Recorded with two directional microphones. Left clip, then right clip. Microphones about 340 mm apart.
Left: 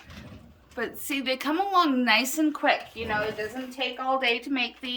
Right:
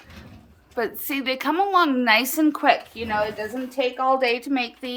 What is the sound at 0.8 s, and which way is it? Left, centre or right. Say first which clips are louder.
A woman's voice: right 5 dB; centre.